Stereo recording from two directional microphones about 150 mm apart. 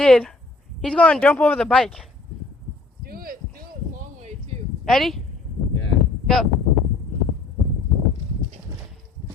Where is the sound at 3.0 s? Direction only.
80° right.